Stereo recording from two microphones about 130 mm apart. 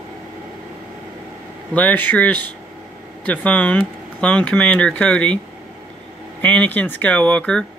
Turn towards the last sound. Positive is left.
turn(degrees=10)  # may be behind; listen again after turning